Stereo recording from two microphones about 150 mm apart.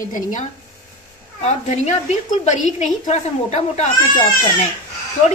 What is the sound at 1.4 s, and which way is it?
A woman's voice, 50° left (ahead or behind).